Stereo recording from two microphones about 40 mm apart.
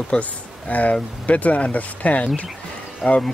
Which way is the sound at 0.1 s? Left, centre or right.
Left.